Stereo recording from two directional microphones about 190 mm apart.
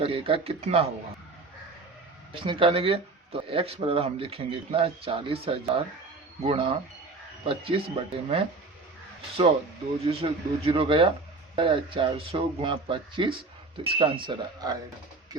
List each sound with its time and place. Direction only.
0.0 s speech: 30° right (ahead or behind)
2.3 s speech: 25° right (ahead or behind)
10.1 s speech: 30° right (ahead or behind)